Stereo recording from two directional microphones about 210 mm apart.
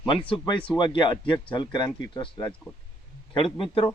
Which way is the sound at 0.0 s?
25° left (ahead or behind).